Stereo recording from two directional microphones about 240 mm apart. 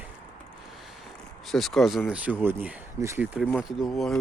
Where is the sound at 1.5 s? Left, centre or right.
Centre.